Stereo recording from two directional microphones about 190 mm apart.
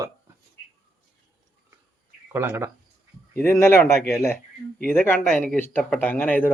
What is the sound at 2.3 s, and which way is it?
Speech, 10° right (ahead or behind).